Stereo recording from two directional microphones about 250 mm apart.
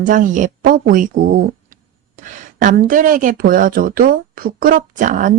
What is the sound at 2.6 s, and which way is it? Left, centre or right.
Speech, right.